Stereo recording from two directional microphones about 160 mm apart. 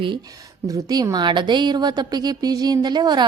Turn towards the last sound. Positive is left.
turn(degrees=-25)  # may be behind; listen again after turning